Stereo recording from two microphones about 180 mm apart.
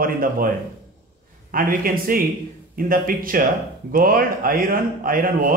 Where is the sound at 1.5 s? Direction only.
50° right (ahead or behind).